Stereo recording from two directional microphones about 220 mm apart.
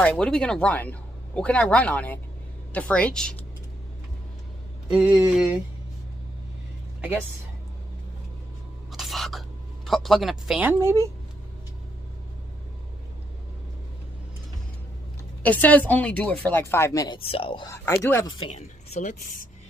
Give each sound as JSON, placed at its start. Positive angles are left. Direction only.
{"t": 0.0, "sound": "speech", "side_deg": 5}
{"t": 4.9, "sound": "speech", "side_deg": -5}
{"t": 8.9, "sound": "whispering", "side_deg": 0}
{"t": 9.8, "sound": "speech", "side_deg": 0}
{"t": 15.4, "sound": "speech", "side_deg": 5}